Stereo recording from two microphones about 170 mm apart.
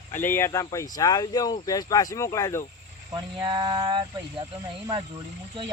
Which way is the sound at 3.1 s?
25° right (ahead or behind).